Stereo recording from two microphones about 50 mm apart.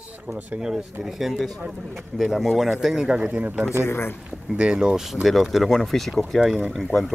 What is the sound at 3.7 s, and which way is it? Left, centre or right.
Speech, left.